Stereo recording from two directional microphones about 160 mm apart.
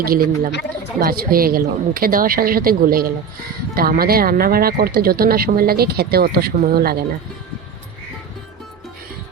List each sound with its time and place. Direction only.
0.0 s a woman's voice: 65° right (ahead or behind)